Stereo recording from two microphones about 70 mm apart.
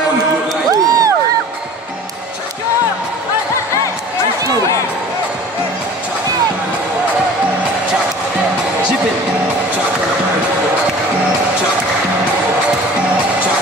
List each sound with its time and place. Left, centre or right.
0.7 s crowd: right